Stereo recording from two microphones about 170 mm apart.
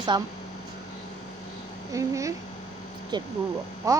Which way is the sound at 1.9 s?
20° right (ahead or behind).